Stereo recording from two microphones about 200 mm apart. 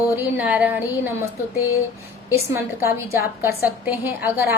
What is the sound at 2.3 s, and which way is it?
A woman's voice, 15° right (ahead or behind).